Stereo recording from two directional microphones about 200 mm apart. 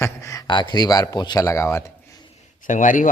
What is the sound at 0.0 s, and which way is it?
Speech, 15° left (ahead or behind).